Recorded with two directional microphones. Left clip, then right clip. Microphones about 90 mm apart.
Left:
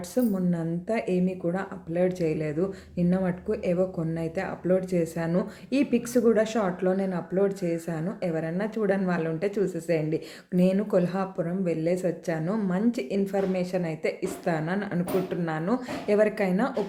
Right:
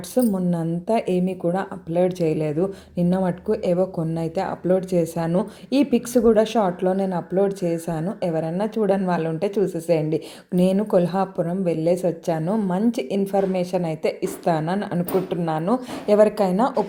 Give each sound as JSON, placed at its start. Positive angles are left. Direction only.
{"t": 0.1, "sound": "a woman's voice", "side_deg": -45}